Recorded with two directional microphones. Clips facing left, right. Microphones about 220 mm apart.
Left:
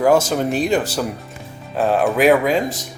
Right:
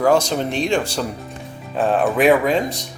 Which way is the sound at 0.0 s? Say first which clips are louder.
Left 1 dB; 5° left (ahead or behind).